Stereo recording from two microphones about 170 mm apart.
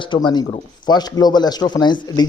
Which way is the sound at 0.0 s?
25° left (ahead or behind).